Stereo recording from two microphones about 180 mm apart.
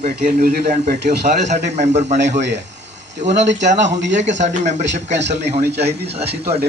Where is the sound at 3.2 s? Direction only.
40° right (ahead or behind).